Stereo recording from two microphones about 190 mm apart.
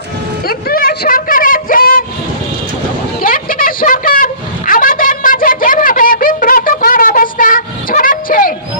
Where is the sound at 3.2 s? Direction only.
50° left (ahead or behind).